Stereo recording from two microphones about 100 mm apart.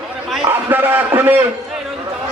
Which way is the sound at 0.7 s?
20° right (ahead or behind).